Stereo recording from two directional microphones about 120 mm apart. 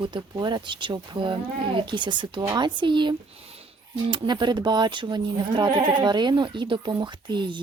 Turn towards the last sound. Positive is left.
turn(degrees=-40)  # may be behind; listen again after turning